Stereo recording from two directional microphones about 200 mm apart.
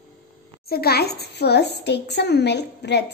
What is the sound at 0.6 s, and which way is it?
A child's voice, 50° left (ahead or behind).